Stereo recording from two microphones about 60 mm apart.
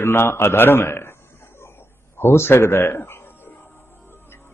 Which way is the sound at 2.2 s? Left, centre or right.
Left.